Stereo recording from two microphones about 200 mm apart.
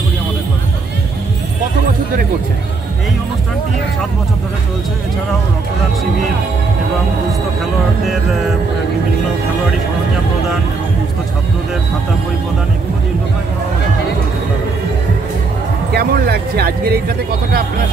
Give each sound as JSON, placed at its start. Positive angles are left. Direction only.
{"t": 15.9, "sound": "speech", "side_deg": -50}